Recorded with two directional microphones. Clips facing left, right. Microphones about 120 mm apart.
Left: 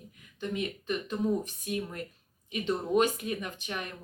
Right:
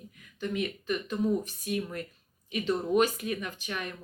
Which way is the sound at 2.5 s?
20° left (ahead or behind).